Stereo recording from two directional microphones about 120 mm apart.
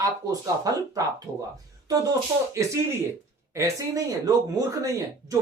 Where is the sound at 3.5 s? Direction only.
25° right (ahead or behind).